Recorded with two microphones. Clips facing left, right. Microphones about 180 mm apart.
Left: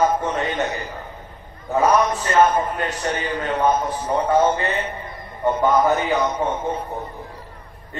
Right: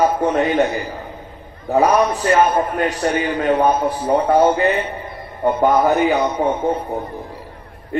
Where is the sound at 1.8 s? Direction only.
10° right (ahead or behind).